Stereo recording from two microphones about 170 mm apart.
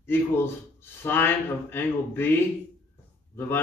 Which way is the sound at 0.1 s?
15° left (ahead or behind).